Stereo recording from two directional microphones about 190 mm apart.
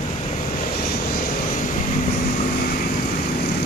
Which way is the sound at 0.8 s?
55° left (ahead or behind).